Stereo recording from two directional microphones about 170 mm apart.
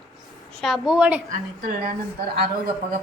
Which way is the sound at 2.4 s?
60° right (ahead or behind).